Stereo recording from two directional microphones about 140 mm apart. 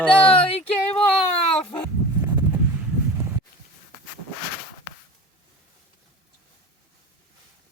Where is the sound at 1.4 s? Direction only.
45° left (ahead or behind).